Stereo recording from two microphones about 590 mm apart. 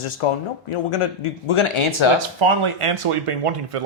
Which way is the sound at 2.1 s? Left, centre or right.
Right.